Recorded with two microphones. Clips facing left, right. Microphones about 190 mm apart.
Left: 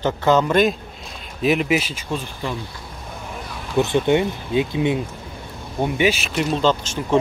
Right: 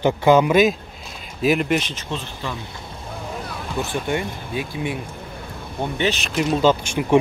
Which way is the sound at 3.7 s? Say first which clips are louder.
Left 7 dB; 20° left (ahead or behind).